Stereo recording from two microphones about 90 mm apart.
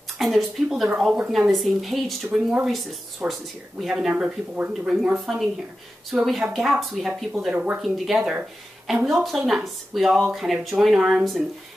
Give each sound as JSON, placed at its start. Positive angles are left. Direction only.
{"t": 0.2, "sound": "speech", "side_deg": 0}
{"t": 7.5, "sound": "speech", "side_deg": -15}
{"t": 8.8, "sound": "speech", "side_deg": -5}